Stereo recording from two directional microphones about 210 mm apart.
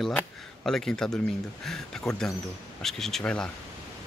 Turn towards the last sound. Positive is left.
turn(degrees=5)  # may be behind; listen again after turning